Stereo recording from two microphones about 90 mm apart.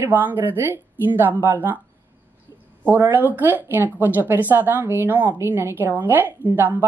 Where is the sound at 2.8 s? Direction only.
20° right (ahead or behind).